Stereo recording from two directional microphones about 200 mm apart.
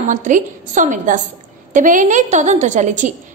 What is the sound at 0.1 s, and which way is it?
A woman's voice, 40° right (ahead or behind).